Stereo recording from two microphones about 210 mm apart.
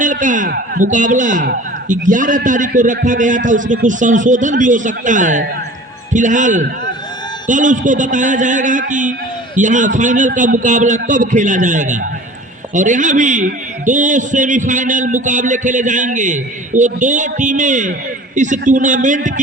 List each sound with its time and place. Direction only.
0.0 s a man's voice: 40° right (ahead or behind)